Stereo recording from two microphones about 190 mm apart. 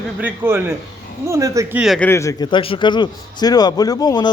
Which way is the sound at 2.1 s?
15° left (ahead or behind).